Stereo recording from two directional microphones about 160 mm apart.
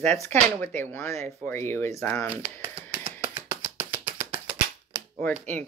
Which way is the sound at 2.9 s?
10° right (ahead or behind).